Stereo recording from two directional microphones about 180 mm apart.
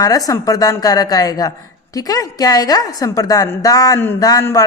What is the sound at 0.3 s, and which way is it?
A woman's voice, 20° left (ahead or behind).